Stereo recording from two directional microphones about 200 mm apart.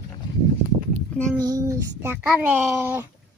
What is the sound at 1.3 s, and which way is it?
Child singing, 20° right (ahead or behind).